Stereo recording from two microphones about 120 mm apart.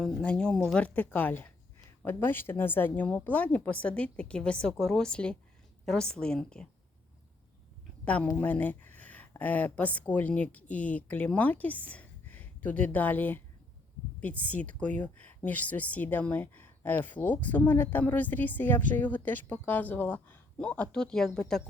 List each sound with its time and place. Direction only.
0.0 s speech: 5° left (ahead or behind)
8.0 s a woman's voice: 10° left (ahead or behind)
8.4 s a sound: 15° left (ahead or behind)
9.3 s speech: 15° left (ahead or behind)